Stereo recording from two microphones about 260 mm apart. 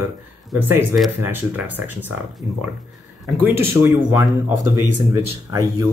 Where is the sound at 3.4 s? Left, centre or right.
Centre.